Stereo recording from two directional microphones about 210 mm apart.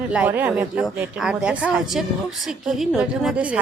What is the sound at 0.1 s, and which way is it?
A woman's voice, 5° right (ahead or behind).